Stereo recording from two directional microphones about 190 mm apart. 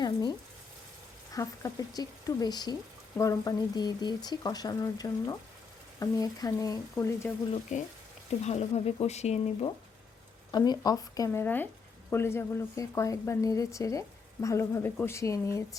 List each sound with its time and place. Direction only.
0.0 s a woman's voice: 20° left (ahead or behind)
7.7 s speech: 40° left (ahead or behind)
10.5 s a woman's voice: 20° left (ahead or behind)